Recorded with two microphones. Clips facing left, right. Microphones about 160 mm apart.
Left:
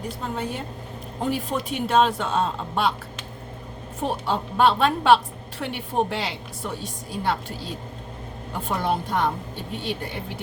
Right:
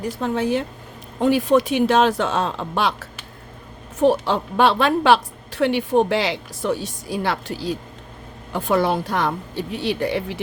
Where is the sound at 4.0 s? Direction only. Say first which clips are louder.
Right 8 dB; 90° right.